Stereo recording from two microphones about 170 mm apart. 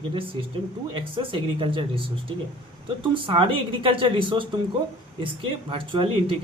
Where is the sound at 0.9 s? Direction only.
30° right (ahead or behind).